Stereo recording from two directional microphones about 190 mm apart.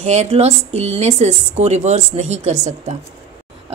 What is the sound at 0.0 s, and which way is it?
A woman's voice, 35° right (ahead or behind).